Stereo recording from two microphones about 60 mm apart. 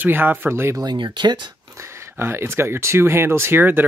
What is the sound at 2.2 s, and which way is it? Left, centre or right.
Speech, right.